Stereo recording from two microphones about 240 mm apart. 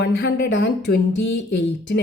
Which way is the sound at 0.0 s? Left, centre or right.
Left.